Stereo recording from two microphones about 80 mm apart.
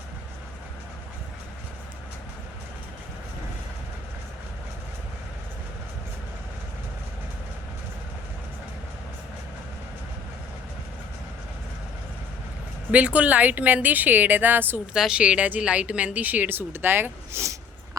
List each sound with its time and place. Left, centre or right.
12.9 s speech: centre
14.9 s speech: centre; by 17.4 s right